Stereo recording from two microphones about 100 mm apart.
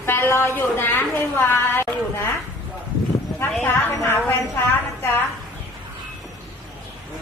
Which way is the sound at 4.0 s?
25° left (ahead or behind).